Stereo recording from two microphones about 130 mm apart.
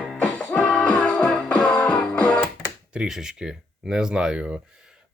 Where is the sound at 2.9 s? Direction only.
5° right (ahead or behind).